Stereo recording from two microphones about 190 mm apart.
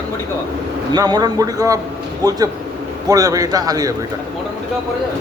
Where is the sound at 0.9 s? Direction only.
20° right (ahead or behind).